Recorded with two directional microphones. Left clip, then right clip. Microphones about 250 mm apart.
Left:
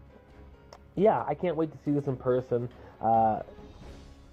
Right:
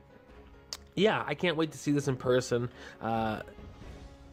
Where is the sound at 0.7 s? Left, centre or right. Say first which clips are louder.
Left 3 dB; right.